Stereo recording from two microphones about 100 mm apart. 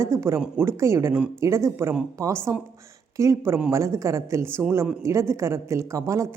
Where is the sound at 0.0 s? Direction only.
25° right (ahead or behind).